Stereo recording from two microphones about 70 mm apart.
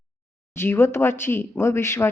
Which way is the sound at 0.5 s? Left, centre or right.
Left.